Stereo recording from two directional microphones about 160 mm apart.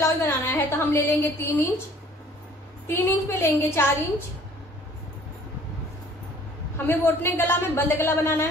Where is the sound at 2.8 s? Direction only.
15° left (ahead or behind).